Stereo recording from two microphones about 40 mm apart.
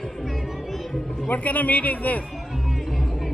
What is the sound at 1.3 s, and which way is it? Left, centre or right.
Speech, left.